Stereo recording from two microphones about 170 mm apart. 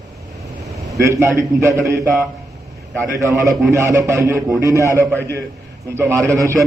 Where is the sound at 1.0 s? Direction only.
15° right (ahead or behind).